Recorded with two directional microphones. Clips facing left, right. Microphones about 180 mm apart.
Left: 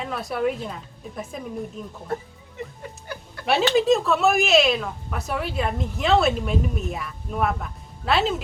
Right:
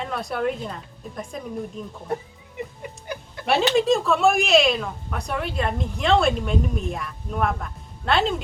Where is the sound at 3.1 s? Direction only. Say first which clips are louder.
Right 3 dB; 15° right (ahead or behind).